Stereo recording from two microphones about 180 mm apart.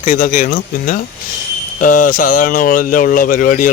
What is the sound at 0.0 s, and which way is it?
Speech, 45° left (ahead or behind).